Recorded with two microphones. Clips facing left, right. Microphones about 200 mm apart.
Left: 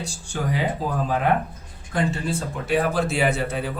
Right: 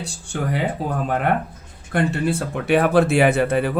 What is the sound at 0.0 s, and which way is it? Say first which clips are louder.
Speech: right 2 dB; 60° right (ahead or behind).